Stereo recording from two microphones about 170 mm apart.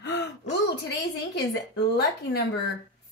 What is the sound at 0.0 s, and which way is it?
Gasp, 90° left.